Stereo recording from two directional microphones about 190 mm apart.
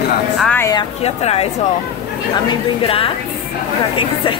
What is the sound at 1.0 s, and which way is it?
Speech, 30° left (ahead or behind).